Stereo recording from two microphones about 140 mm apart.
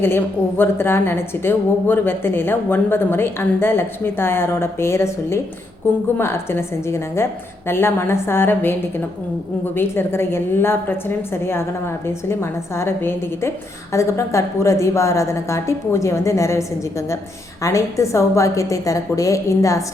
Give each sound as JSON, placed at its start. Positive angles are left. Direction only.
{"t": 0.0, "sound": "a woman's voice", "side_deg": 15}
{"t": 9.7, "sound": "a woman's voice", "side_deg": 15}